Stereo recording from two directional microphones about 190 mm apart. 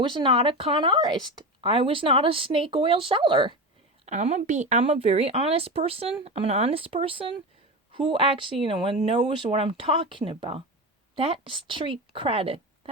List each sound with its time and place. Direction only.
0.0 s speech: 25° right (ahead or behind)
4.0 s a woman's voice: 35° right (ahead or behind)